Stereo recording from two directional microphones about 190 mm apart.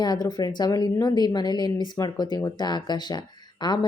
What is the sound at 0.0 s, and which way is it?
Speech, 20° left (ahead or behind).